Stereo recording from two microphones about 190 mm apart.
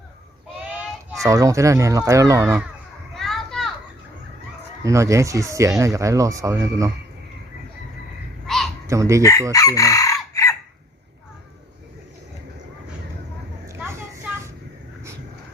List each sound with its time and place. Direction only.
0.7 s speech: 10° right (ahead or behind)
3.2 s children playing: centre (ahead or behind)
4.8 s speech: 15° right (ahead or behind)
8.4 s a sound: centre (ahead or behind)
8.9 s speech: 15° right (ahead or behind)
9.5 s chicken: 20° left (ahead or behind)
13.7 s vehicle: 15° right (ahead or behind)